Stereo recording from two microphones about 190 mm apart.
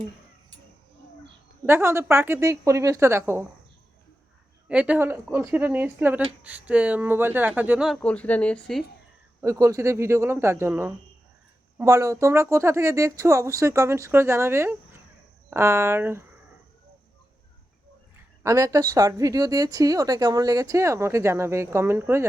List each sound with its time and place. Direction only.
1.6 s speech: 15° right (ahead or behind)
4.7 s speech: 5° right (ahead or behind)
9.4 s speech: 15° right (ahead or behind)
18.4 s speech: 15° right (ahead or behind)